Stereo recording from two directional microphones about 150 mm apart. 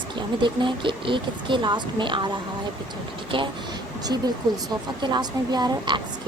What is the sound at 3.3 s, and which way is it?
A woman's voice, 35° right (ahead or behind).